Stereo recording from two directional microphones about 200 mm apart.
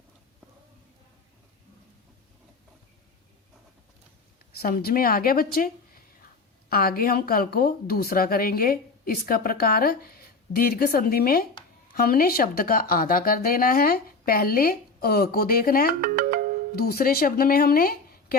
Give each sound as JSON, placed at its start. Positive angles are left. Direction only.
{"t": 4.5, "sound": "speech", "side_deg": 50}
{"t": 16.0, "sound": "music", "side_deg": -45}
{"t": 16.7, "sound": "speech", "side_deg": 50}